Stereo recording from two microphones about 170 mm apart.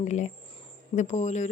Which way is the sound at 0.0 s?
45° left (ahead or behind).